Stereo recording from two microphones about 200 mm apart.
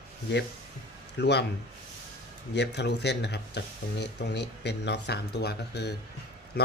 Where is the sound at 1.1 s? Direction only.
60° left (ahead or behind).